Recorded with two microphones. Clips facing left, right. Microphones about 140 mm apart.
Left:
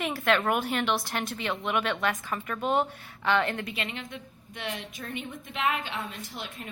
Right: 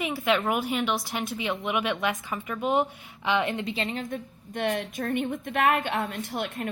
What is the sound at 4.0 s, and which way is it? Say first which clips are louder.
A woman's voice: right 7 dB; 45° right (ahead or behind).